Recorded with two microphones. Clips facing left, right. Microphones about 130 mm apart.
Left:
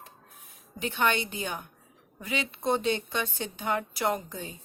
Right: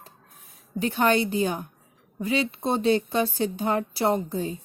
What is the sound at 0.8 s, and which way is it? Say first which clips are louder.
Speech: right 6 dB; 40° right (ahead or behind).